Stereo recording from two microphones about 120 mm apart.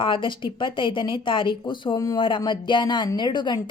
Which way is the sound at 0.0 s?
45° left (ahead or behind).